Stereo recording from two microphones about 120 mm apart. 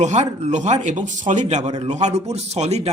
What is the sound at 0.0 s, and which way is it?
Speech, 70° right (ahead or behind).